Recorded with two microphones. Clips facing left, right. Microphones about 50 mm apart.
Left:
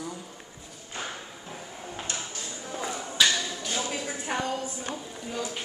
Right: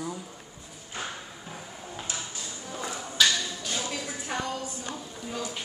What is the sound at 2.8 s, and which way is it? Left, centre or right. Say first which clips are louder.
Tap: left 2 dB; centre.